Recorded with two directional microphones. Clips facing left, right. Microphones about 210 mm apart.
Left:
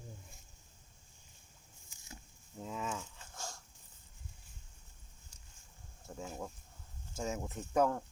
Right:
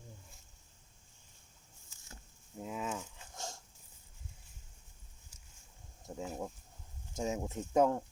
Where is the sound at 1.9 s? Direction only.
15° left (ahead or behind).